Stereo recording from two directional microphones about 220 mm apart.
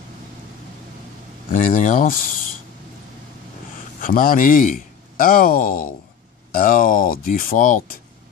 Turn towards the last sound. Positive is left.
turn(degrees=35)  # may be behind; listen again after turning